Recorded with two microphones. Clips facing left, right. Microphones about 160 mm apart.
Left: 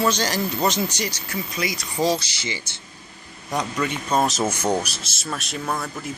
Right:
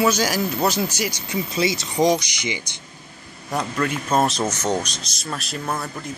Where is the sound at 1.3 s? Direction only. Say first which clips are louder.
Right 5 dB; 20° right (ahead or behind).